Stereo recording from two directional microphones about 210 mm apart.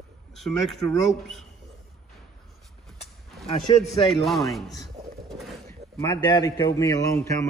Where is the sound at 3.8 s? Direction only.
Centre (ahead or behind).